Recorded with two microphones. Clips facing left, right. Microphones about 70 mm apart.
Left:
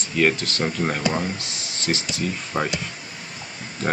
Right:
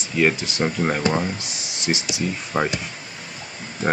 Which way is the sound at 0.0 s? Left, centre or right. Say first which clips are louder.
Right 1 dB; centre.